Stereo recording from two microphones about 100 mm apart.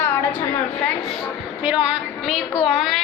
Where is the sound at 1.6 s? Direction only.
15° right (ahead or behind).